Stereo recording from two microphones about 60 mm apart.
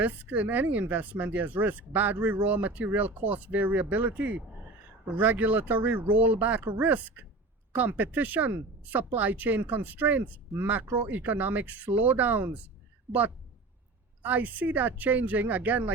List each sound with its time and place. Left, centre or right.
0.0 s speech: right
14.2 s speech: right